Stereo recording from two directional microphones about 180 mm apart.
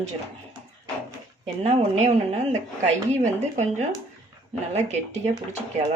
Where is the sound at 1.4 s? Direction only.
35° right (ahead or behind).